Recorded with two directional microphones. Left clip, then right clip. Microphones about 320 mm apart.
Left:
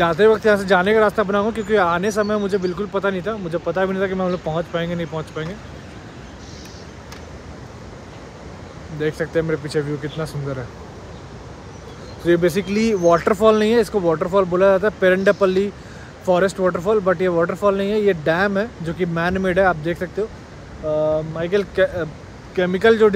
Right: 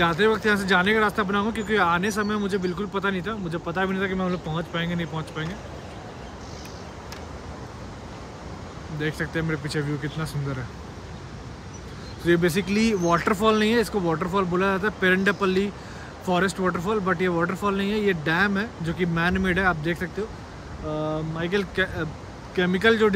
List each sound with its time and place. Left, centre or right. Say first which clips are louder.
0.0 s speech: left 6 dB; centre
9.0 s speech: left 7 dB; centre
12.3 s speech: left 5 dB; centre